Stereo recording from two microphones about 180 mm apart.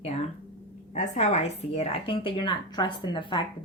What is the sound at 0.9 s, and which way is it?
Speech, 40° left (ahead or behind).